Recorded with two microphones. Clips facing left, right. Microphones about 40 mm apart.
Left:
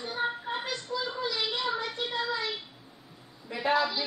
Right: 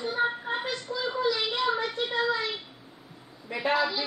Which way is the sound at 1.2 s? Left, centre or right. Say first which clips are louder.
Right 7 dB; centre.